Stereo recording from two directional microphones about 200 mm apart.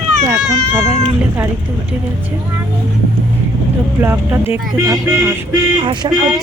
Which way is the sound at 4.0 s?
15° right (ahead or behind).